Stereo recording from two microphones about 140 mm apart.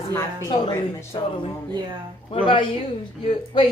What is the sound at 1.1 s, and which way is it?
A woman's voice, 35° left (ahead or behind).